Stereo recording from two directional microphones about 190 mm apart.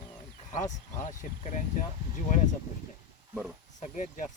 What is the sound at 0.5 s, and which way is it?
Speech, 40° left (ahead or behind).